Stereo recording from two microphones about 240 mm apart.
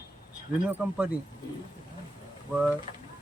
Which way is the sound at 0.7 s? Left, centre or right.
Centre.